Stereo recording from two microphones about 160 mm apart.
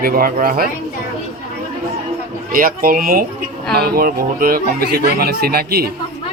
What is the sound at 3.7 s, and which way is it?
Speech, 75° right (ahead or behind).